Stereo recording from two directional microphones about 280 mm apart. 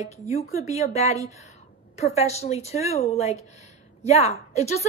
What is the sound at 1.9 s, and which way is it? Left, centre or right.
A woman's voice, left.